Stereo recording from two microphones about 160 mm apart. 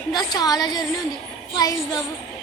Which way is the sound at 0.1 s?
25° left (ahead or behind).